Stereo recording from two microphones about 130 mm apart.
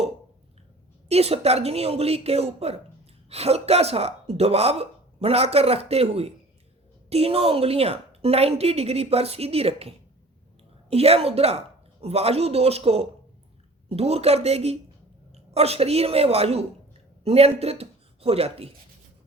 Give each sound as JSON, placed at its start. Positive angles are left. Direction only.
{"t": 1.0, "sound": "a woman's voice", "side_deg": -50}